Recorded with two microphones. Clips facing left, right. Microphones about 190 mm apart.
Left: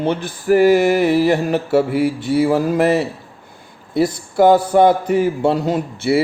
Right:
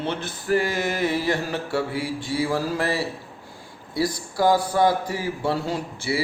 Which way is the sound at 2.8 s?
20° left (ahead or behind).